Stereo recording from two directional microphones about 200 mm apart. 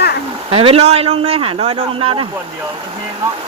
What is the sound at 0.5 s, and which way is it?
A man's voice, 30° right (ahead or behind).